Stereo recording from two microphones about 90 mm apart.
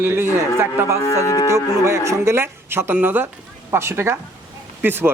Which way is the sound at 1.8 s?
30° right (ahead or behind).